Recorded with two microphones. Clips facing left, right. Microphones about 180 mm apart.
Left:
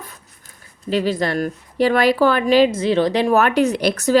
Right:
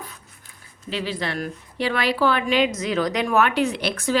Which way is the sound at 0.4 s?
45° left (ahead or behind).